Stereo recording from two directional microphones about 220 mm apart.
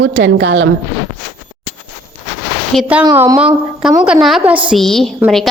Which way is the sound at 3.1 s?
15° right (ahead or behind).